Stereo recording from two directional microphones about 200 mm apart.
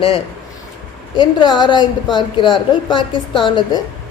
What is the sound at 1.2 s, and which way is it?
A woman's voice, 20° left (ahead or behind).